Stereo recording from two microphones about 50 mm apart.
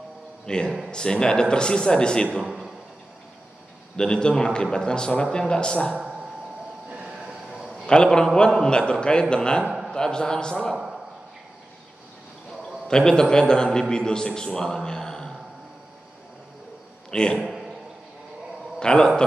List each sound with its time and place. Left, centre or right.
0.5 s a man's voice: centre
2.3 s a man's voice: centre
3.9 s a man's voice: centre
6.9 s a sound: right
7.8 s a man's voice: centre
12.8 s a man's voice: centre
17.1 s a man's voice: centre
17.4 s a sound: centre
18.8 s a man's voice: centre